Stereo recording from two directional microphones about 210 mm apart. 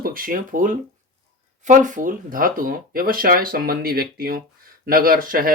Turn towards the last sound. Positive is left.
turn(degrees=-45)  # may be behind; listen again after turning